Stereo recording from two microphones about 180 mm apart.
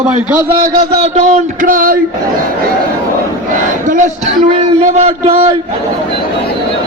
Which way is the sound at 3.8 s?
45° right (ahead or behind).